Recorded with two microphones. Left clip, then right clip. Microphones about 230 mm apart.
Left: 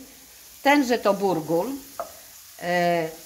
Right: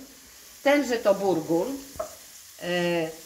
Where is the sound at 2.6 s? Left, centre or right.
Left.